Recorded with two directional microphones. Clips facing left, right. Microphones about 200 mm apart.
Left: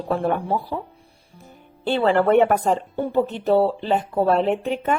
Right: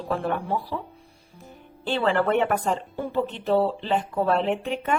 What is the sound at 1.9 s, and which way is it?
A woman's voice, 40° left (ahead or behind).